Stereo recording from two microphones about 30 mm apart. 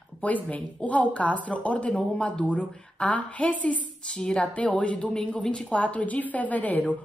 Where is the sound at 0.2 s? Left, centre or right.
Left.